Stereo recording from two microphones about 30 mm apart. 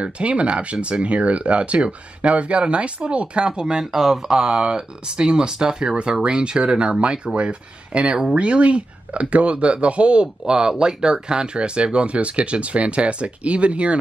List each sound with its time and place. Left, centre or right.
0.0 s speech: right
3.8 s speech: centre; by 10.2 s right
10.2 s speech: right